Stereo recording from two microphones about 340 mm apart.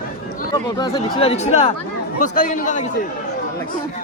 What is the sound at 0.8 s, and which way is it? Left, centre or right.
Speech, centre.